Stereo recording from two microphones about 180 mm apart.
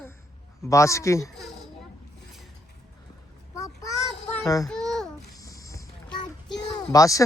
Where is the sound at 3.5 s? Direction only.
20° left (ahead or behind).